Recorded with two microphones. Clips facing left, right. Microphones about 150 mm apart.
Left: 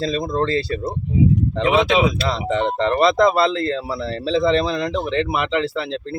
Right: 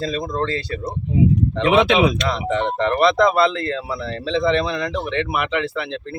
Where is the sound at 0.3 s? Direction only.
35° left (ahead or behind).